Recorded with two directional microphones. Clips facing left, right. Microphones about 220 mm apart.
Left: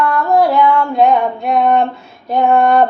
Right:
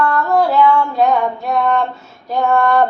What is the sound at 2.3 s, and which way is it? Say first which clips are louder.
Female singing: left 3 dB; 20° left (ahead or behind).